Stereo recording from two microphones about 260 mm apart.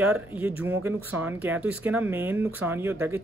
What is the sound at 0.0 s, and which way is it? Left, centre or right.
Speech, centre.